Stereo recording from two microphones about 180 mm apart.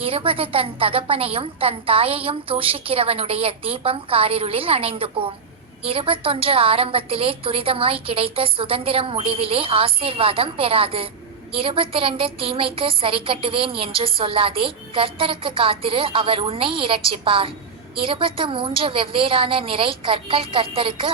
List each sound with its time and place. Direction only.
0.0 s a woman's voice: 30° right (ahead or behind)